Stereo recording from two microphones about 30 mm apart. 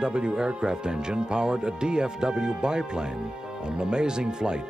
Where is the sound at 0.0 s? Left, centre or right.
Right.